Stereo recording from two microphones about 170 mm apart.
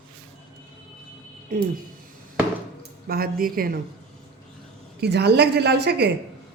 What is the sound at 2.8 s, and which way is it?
Speech, 65° right (ahead or behind).